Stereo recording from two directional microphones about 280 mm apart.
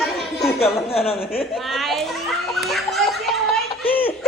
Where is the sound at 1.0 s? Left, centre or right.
Left.